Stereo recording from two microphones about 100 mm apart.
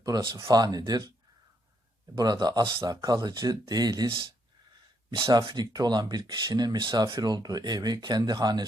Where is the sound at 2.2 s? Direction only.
45° right (ahead or behind).